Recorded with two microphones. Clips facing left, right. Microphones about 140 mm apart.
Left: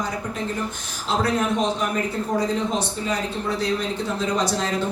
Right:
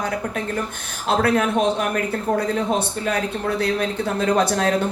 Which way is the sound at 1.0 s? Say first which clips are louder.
Right 3 dB; 60° right (ahead or behind).